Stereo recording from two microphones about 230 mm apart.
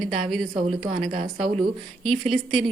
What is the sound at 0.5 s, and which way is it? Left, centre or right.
A woman's voice, right.